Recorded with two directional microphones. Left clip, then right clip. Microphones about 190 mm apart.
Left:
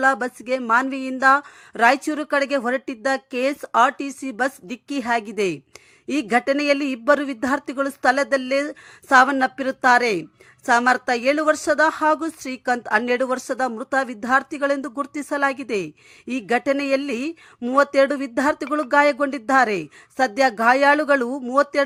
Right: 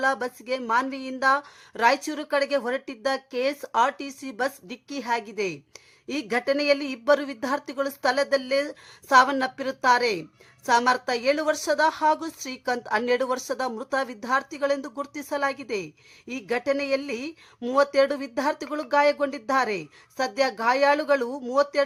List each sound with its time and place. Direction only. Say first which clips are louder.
0.0 s a woman's voice: left 6 dB; 25° left (ahead or behind)